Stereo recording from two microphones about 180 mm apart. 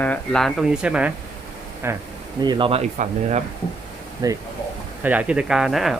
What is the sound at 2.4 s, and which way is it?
Speech, 25° right (ahead or behind).